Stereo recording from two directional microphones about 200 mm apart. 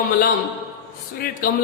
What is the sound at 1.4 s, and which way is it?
Speech, 45° left (ahead or behind).